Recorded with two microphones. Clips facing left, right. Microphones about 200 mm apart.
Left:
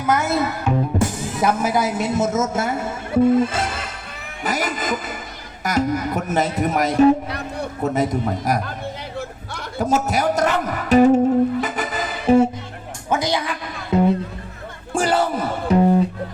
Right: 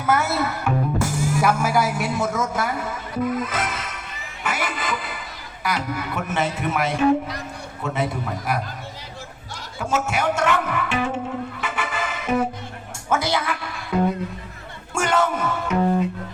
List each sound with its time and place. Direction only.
0.0 s a man's voice: 15° left (ahead or behind); by 7.1 s 40° left (ahead or behind)
7.3 s a sound: 60° left (ahead or behind)
7.8 s a man's voice: 40° left (ahead or behind)
9.7 s a man's voice: 40° left (ahead or behind)
11.6 s music: 40° left (ahead or behind)
13.1 s speech: 15° left (ahead or behind)
14.9 s speech: 35° left (ahead or behind)